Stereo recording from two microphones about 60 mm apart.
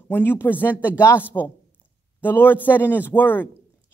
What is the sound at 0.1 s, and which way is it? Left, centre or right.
A man's voice, left.